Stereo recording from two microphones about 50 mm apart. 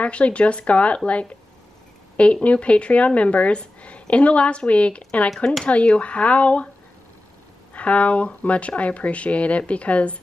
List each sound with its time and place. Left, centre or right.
0.0 s speech: left
2.4 s speech: left
7.7 s speech: left